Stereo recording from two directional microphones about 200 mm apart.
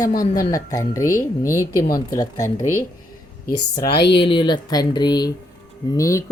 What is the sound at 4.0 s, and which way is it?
Speech, 60° left (ahead or behind).